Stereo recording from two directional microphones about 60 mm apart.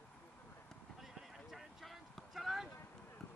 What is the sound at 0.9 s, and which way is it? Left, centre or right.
Clip-clop, centre.